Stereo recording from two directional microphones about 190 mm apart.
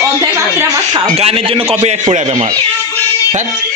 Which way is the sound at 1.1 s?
30° right (ahead or behind).